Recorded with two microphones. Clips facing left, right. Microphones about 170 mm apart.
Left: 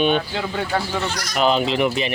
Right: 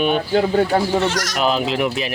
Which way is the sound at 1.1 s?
90° right.